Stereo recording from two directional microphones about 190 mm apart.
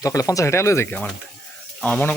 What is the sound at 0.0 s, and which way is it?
Speech, 15° left (ahead or behind).